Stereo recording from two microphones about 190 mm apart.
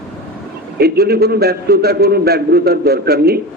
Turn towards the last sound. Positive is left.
turn(degrees=-55)  # may be behind; listen again after turning